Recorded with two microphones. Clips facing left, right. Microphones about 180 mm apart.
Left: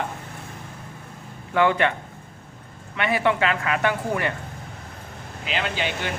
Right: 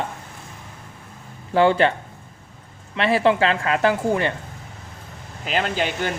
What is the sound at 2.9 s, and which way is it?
Speech, 30° right (ahead or behind).